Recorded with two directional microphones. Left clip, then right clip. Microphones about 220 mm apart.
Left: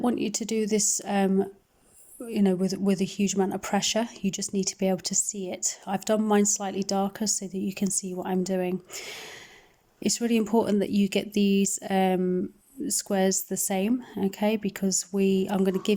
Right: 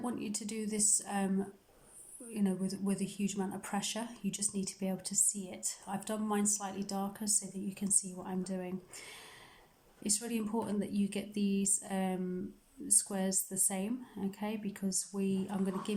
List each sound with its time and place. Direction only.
0.0 s a woman's voice: 40° left (ahead or behind)